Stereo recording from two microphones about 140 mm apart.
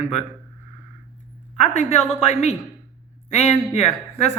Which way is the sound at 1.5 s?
55° left (ahead or behind).